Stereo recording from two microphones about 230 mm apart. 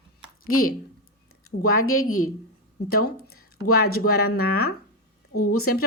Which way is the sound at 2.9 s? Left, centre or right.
Left.